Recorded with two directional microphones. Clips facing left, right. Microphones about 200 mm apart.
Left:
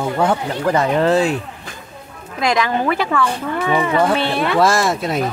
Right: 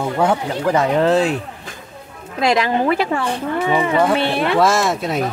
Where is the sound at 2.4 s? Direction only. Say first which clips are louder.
Right 1 dB; 30° right (ahead or behind).